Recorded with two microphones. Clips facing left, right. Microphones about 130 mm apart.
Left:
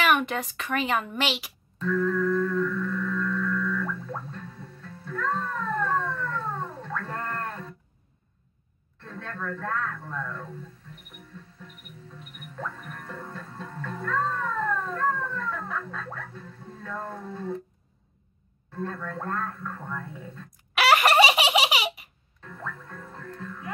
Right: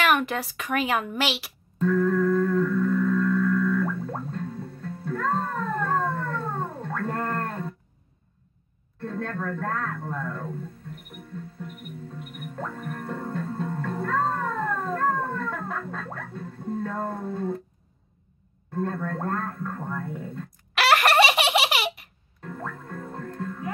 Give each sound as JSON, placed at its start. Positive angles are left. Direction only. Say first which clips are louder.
{"t": 0.0, "sound": "speech", "louder": "right 1 dB", "side_deg": 0}
{"t": 1.8, "sound": "music", "louder": "right 3 dB", "side_deg": -50}
{"t": 9.0, "sound": "speech", "louder": "right 6 dB", "side_deg": -45}
{"t": 12.2, "sound": "music", "louder": "right 1 dB", "side_deg": -50}
{"t": 17.1, "sound": "speech", "louder": "right 4 dB", "side_deg": -45}
{"t": 18.9, "sound": "speech", "louder": "right 3 dB", "side_deg": -45}
{"t": 20.7, "sound": "baby laughter", "louder": "even", "side_deg": 0}
{"t": 22.4, "sound": "music", "louder": "right 4 dB", "side_deg": -45}